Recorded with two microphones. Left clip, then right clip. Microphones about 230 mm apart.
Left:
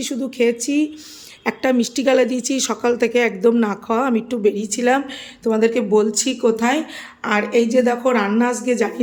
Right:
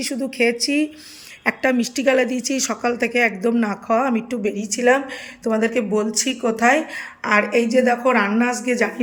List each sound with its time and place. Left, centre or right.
0.0 s a woman's voice: centre